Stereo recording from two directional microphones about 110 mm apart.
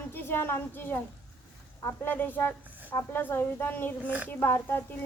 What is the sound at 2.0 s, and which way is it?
A woman's voice, 15° left (ahead or behind).